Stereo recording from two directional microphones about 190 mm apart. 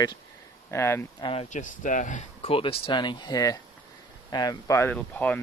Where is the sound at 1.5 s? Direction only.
40° left (ahead or behind).